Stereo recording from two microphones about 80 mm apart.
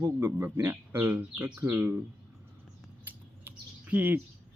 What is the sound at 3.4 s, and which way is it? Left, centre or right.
Chirp, right.